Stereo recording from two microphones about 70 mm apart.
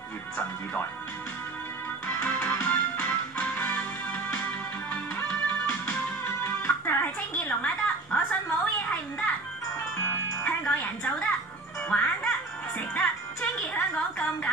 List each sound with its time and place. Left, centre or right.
2.0 s music: left
6.2 s music: left
10.4 s music: left